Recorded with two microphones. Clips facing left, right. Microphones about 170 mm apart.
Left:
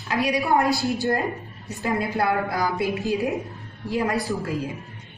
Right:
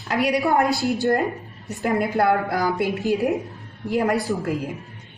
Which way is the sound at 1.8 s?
50° right (ahead or behind).